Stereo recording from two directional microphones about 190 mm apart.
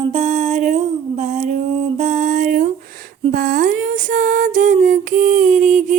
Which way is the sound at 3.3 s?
45° right (ahead or behind).